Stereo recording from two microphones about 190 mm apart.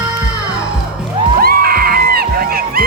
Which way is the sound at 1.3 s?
50° right (ahead or behind).